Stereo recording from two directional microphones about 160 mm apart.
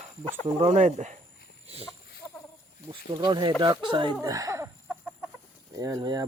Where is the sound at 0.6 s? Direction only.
45° right (ahead or behind).